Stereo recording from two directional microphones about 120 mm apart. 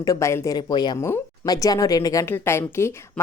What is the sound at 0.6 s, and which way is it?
A woman's voice, 35° left (ahead or behind).